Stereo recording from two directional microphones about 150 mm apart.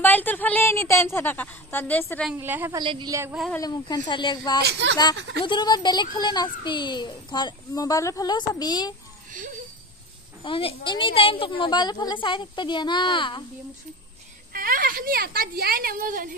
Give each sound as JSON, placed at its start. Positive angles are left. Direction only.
{"t": 0.0, "sound": "a woman's voice", "side_deg": 10}
{"t": 2.3, "sound": "a woman's voice", "side_deg": -15}
{"t": 2.8, "sound": "speech", "side_deg": -30}
{"t": 3.5, "sound": "a child's voice", "side_deg": 25}
{"t": 10.4, "sound": "a woman's voice", "side_deg": 35}
{"t": 14.5, "sound": "a woman's voice", "side_deg": -70}